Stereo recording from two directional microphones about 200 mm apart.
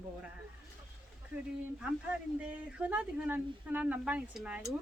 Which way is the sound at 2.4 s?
5° right (ahead or behind).